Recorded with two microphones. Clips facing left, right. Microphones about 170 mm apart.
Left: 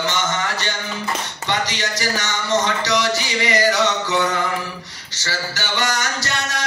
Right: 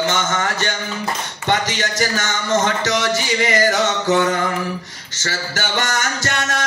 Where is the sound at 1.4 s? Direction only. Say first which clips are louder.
Right 4 dB; 50° right (ahead or behind).